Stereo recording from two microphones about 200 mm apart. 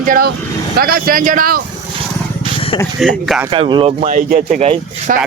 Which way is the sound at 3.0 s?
Centre (ahead or behind).